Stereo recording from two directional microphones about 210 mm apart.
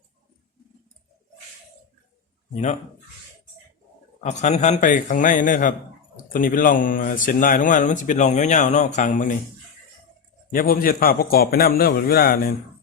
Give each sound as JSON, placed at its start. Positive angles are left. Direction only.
{"t": 4.2, "sound": "speech", "side_deg": 35}
{"t": 10.5, "sound": "a man's voice", "side_deg": 40}